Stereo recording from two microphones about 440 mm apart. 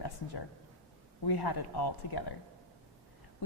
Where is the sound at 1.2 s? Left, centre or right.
Left.